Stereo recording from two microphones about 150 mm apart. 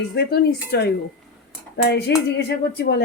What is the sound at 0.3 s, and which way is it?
Speech, 90° left.